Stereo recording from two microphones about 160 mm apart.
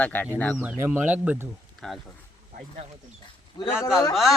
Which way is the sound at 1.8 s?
5° left (ahead or behind).